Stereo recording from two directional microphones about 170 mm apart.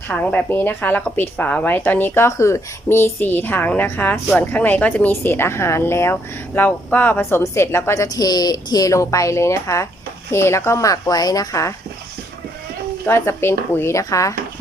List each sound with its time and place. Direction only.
0.1 s a woman's voice: 10° left (ahead or behind)
13.1 s speech: 15° left (ahead or behind)